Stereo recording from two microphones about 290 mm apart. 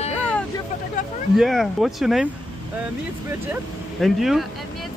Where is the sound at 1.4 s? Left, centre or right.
Centre.